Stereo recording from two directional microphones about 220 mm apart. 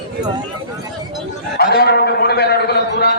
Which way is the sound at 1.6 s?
45° left (ahead or behind).